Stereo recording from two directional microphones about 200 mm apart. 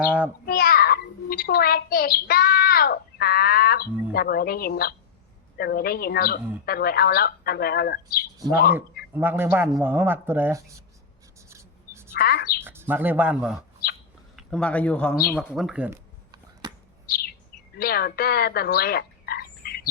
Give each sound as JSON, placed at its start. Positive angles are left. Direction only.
{"t": 0.4, "sound": "a child's voice", "side_deg": 50}
{"t": 9.1, "sound": "speech", "side_deg": -10}
{"t": 11.4, "sound": "rub", "side_deg": -15}
{"t": 12.1, "sound": "speech", "side_deg": 50}
{"t": 12.5, "sound": "a man's voice", "side_deg": -10}
{"t": 15.5, "sound": "speech", "side_deg": -5}
{"t": 16.3, "sound": "a sound", "side_deg": -20}
{"t": 17.7, "sound": "frog", "side_deg": 50}